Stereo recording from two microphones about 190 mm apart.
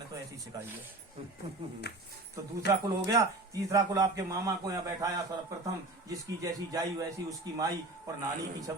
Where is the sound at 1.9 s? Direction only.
60° left (ahead or behind).